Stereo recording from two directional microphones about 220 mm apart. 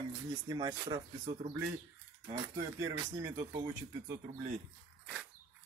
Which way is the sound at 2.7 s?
15° right (ahead or behind).